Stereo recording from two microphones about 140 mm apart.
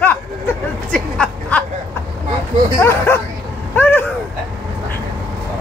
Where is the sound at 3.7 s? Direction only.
15° left (ahead or behind).